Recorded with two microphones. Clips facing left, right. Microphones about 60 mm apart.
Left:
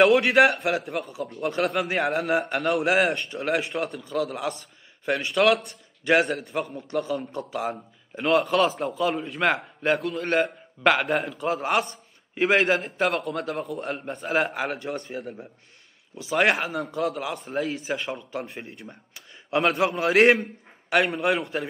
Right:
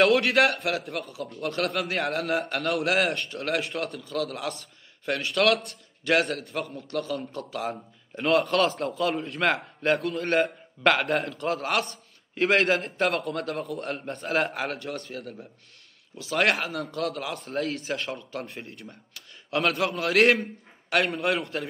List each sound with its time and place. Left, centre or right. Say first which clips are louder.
0.0 s a man's voice: left 3 dB; centre
8.1 s a man's voice: left 1 dB; centre
16.2 s a man's voice: left 2 dB; centre
18.9 s a sound: left 1 dB; centre
19.8 s a man's voice: left 3 dB; centre
20.9 s a man's voice: left 2 dB; centre